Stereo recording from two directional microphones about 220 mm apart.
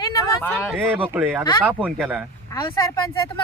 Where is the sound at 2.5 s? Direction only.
15° left (ahead or behind).